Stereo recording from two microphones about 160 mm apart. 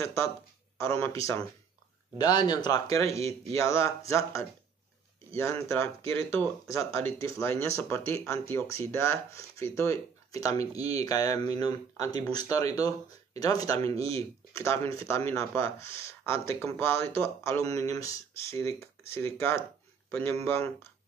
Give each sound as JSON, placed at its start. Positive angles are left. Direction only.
{"t": 0.0, "sound": "a man's voice", "side_deg": 15}